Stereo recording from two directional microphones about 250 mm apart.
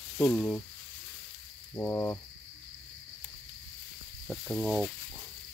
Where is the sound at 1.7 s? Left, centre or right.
Centre.